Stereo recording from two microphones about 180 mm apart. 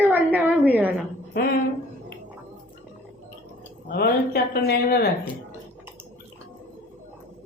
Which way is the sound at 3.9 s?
60° left (ahead or behind).